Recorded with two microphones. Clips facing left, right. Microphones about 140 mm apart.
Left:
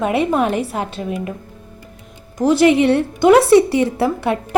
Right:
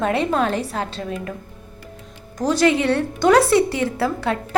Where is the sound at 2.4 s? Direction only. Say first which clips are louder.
Left 5 dB; 15° left (ahead or behind).